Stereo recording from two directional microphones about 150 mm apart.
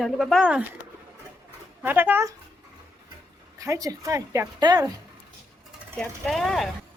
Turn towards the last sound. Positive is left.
turn(degrees=0)  # may be behind; listen again after turning